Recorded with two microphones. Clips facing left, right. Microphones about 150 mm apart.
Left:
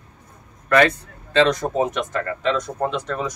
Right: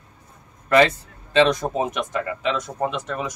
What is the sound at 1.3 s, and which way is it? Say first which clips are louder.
Speech: even; 20° right (ahead or behind).